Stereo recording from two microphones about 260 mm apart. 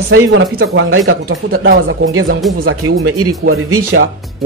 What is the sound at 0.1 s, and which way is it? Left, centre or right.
Speech, right.